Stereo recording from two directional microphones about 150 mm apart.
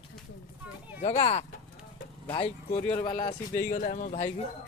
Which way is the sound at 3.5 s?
65° left (ahead or behind).